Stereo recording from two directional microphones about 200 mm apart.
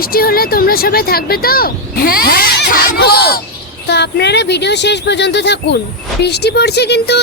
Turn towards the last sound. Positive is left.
turn(degrees=55)  # may be behind; listen again after turning